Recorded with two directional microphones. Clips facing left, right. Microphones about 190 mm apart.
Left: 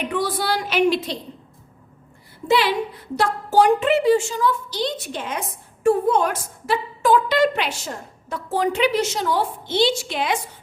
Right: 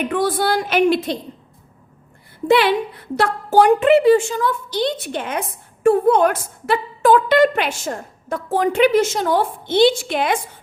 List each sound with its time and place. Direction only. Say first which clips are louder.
0.1 s a woman's voice: right 4 dB; 50° right (ahead or behind)
2.5 s a woman's voice: right 4 dB; 60° right (ahead or behind)